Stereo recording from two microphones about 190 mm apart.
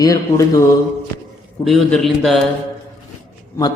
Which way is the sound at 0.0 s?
20° left (ahead or behind).